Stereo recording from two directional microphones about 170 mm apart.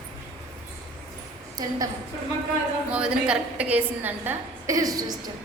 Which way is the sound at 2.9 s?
5° right (ahead or behind).